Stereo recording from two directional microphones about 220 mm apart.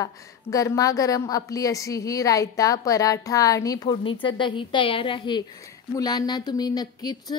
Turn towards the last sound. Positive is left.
turn(degrees=20)  # may be behind; listen again after turning